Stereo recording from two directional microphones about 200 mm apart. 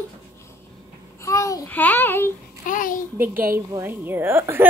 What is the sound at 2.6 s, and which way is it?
Speech, 45° left (ahead or behind).